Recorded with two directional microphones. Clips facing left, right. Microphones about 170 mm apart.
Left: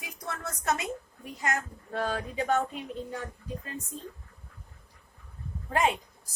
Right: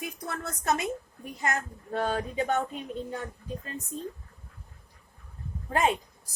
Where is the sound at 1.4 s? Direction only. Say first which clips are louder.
Right 1 dB; 25° right (ahead or behind).